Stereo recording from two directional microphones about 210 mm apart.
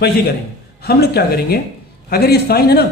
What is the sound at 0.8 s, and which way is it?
A man's voice, 50° left (ahead or behind).